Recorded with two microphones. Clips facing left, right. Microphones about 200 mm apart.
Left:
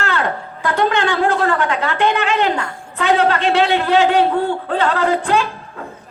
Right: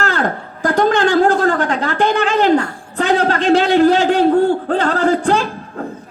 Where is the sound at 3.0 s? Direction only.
40° right (ahead or behind).